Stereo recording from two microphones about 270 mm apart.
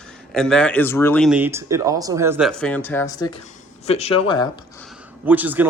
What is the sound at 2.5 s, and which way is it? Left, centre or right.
Speech, centre.